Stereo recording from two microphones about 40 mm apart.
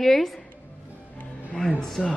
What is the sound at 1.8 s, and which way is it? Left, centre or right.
Speech, left.